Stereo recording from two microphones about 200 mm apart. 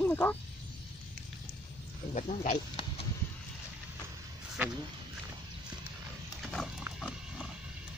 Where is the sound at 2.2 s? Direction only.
35° left (ahead or behind).